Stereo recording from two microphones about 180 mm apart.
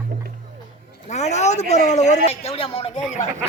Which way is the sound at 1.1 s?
40° left (ahead or behind).